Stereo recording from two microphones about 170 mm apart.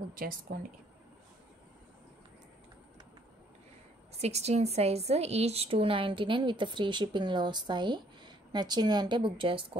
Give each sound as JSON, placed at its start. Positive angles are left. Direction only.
{"t": 0.1, "sound": "speech", "side_deg": -60}
{"t": 4.2, "sound": "a woman's voice", "side_deg": -40}